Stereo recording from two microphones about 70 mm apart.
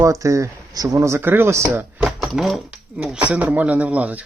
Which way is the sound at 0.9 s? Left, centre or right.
Right.